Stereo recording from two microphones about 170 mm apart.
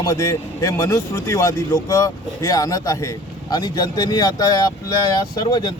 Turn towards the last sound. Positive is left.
turn(degrees=25)  # may be behind; listen again after turning